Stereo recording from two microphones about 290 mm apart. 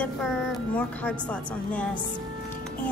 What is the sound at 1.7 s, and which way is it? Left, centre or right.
Speech, centre.